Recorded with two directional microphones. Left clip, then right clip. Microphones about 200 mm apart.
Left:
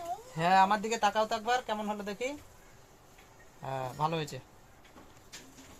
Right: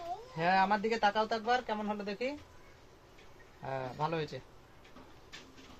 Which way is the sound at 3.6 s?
40° left (ahead or behind).